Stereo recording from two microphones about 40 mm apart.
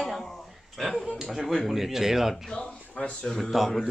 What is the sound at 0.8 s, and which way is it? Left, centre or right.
Speech, centre.